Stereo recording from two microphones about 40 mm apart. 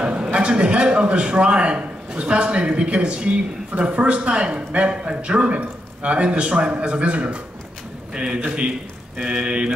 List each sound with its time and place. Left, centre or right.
0.3 s a man's voice: right